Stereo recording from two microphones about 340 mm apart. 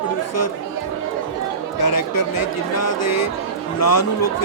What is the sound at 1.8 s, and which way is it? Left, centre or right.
Speech, left.